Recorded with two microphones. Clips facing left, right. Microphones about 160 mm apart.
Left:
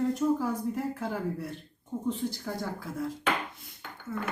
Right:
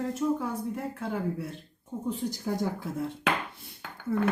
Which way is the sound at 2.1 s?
15° right (ahead or behind).